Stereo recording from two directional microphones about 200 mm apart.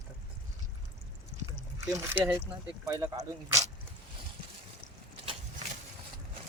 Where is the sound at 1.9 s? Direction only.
10° right (ahead or behind).